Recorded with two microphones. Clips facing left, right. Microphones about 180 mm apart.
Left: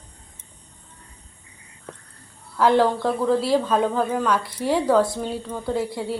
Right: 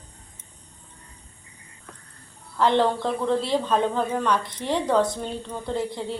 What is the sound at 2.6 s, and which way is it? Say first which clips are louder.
A woman's voice: left 3 dB; 5° left (ahead or behind).